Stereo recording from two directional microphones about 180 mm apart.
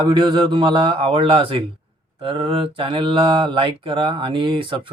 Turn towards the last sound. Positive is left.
turn(degrees=-30)  # may be behind; listen again after turning